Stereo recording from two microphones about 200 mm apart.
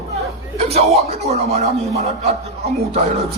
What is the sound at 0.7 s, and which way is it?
Speech, 30° right (ahead or behind).